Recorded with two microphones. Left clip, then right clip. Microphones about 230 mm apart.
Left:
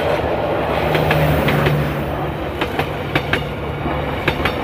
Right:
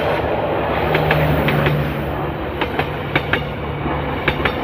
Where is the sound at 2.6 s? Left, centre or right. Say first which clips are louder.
Even; left.